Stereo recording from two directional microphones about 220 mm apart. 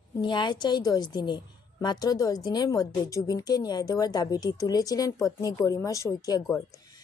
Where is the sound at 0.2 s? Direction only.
20° left (ahead or behind).